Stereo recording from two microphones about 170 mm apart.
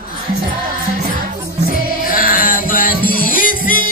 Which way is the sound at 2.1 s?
55° left (ahead or behind).